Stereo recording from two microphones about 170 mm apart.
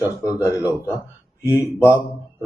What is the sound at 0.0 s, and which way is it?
Speech, 15° right (ahead or behind).